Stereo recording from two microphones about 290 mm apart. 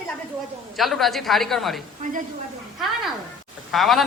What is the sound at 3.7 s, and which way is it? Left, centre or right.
Speech, centre.